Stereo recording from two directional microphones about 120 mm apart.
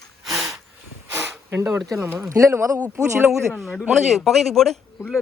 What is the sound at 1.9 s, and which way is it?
Speech, 20° right (ahead or behind).